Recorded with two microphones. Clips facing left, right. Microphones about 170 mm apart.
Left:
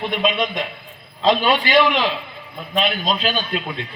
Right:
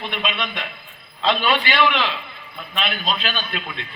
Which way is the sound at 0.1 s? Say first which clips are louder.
Left 7 dB; 40° left (ahead or behind).